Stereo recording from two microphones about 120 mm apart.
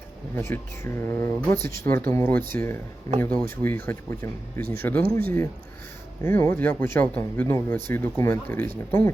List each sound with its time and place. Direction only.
0.3 s speech: 20° left (ahead or behind)